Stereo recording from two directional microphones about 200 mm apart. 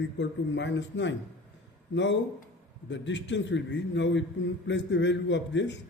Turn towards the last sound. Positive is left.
turn(degrees=65)  # may be behind; listen again after turning